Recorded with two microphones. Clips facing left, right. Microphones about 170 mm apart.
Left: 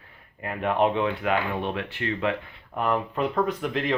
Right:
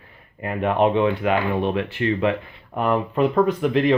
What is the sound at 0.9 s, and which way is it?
Speech, 10° right (ahead or behind).